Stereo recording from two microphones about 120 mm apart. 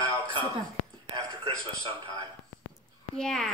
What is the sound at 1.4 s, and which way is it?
Speech, 40° right (ahead or behind).